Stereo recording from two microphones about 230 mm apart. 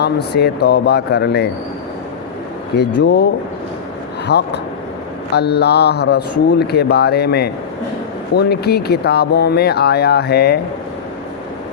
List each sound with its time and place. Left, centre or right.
0.0 s speech: left
3.0 s speech: left
4.3 s speech: left